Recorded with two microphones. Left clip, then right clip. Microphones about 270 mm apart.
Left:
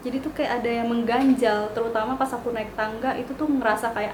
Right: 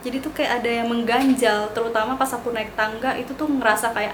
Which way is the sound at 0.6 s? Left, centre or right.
Centre.